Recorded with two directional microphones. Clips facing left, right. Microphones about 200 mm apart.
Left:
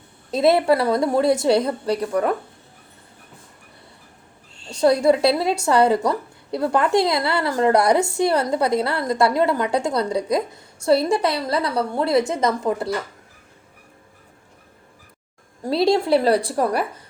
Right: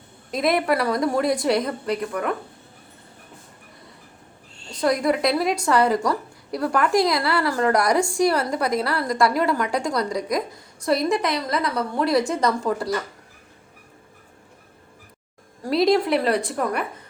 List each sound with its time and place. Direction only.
0.3 s a woman's voice: 30° left (ahead or behind)
4.8 s a woman's voice: 30° left (ahead or behind)
15.6 s a woman's voice: 30° left (ahead or behind)